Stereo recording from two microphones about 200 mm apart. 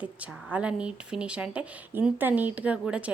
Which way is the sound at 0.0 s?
5° right (ahead or behind).